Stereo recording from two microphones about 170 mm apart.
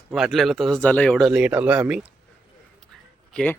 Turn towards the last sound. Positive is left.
turn(degrees=5)  # may be behind; listen again after turning